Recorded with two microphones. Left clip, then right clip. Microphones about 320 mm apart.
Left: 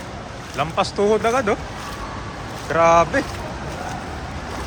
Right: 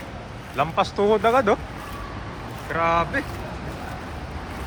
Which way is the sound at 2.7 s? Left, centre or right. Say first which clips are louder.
Left 7 dB; centre.